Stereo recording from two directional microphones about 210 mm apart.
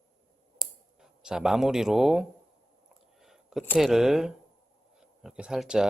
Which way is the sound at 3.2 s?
Centre (ahead or behind).